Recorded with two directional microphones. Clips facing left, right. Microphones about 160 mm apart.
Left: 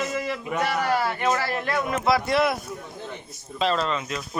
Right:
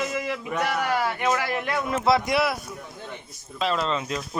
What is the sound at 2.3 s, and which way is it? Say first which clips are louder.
A man's voice: left 2 dB; 5° right (ahead or behind).